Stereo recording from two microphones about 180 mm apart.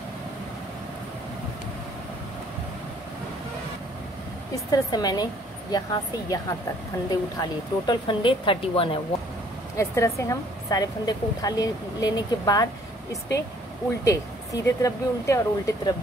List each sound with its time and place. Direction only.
4.6 s a woman's voice: 20° left (ahead or behind)
9.8 s a woman's voice: 15° left (ahead or behind)
14.0 s speech: 20° left (ahead or behind)